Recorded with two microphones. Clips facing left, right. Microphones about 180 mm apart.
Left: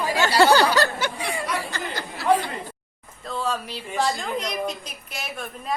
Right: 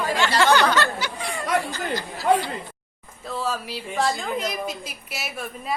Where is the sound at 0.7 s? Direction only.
40° left (ahead or behind).